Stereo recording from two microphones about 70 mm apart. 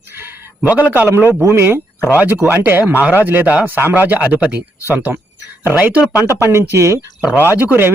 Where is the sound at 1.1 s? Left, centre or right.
Right.